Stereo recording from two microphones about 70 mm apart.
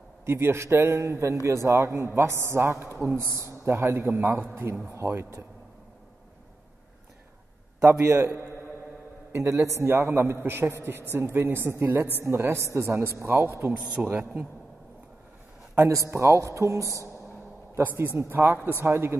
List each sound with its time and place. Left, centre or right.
0.2 s a man's voice: right
8.1 s a man's voice: right
14.1 s a man's voice: right
15.7 s a woman's voice: right
18.1 s a man's voice: right